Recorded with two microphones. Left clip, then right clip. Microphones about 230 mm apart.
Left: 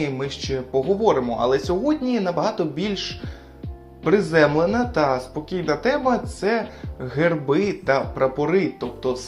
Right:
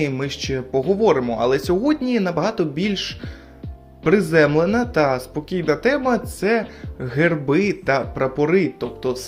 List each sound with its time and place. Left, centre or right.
0.0 s speech: right